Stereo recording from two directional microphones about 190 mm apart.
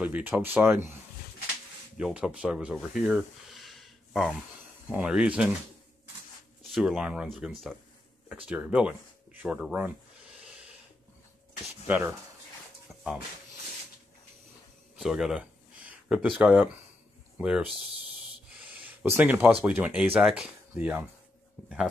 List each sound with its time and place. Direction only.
0.0 s speech: 10° right (ahead or behind)
2.0 s speech: 5° right (ahead or behind)
6.6 s speech: centre (ahead or behind)
10.4 s snort: 5° right (ahead or behind)
11.9 s speech: 10° right (ahead or behind)
15.0 s speech: centre (ahead or behind)
19.0 s speech: 10° right (ahead or behind)